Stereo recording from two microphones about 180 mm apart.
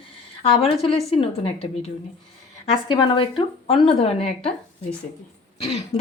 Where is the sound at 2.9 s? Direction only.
25° left (ahead or behind).